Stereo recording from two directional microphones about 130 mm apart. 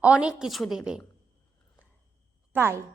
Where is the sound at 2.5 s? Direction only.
20° right (ahead or behind).